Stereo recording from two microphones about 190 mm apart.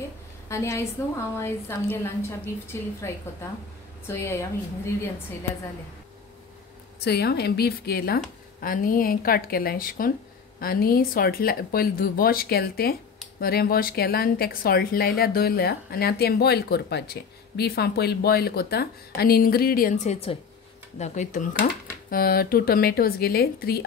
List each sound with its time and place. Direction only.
0.5 s a woman's voice: 15° left (ahead or behind)
4.1 s a woman's voice: 15° left (ahead or behind)
7.0 s a woman's voice: 60° left (ahead or behind); by 21.5 s 40° left (ahead or behind)
22.1 s a woman's voice: 50° left (ahead or behind)